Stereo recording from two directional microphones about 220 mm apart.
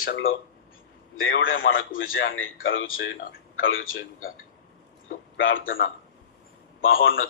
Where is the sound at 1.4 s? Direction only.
60° left (ahead or behind).